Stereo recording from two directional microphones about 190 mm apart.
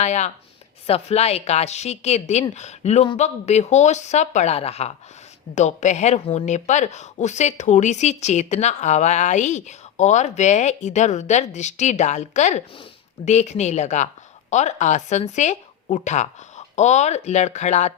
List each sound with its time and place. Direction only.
0.0 s speech: 35° left (ahead or behind)